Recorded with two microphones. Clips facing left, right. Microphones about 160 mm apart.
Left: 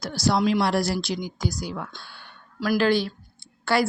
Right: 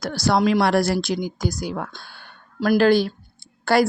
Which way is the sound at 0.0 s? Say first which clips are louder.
Right 3 dB; 60° right (ahead or behind).